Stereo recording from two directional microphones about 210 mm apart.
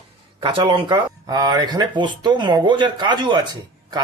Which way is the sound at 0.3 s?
20° right (ahead or behind).